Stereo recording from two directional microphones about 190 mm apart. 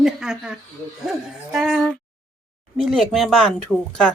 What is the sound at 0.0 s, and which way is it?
A woman's voice, centre (ahead or behind).